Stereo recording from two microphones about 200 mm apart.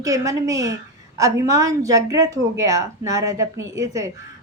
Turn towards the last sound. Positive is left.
turn(degrees=-15)  # may be behind; listen again after turning